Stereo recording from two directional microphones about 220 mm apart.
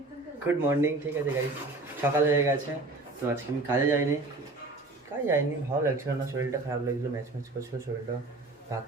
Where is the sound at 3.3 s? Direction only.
10° right (ahead or behind).